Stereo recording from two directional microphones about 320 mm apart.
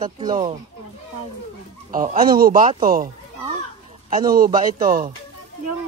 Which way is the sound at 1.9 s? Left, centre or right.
Right.